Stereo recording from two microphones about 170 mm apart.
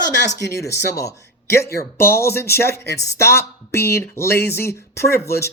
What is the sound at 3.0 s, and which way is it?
Speech, 15° left (ahead or behind).